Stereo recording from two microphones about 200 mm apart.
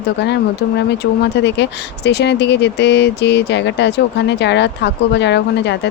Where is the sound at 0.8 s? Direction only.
60° left (ahead or behind).